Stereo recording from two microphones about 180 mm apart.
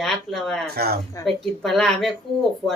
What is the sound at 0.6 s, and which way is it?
Speech, 60° right (ahead or behind).